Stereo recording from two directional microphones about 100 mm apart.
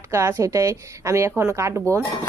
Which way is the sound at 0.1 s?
25° right (ahead or behind).